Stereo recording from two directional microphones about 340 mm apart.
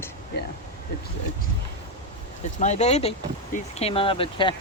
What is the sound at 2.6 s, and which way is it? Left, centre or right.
Speech, centre.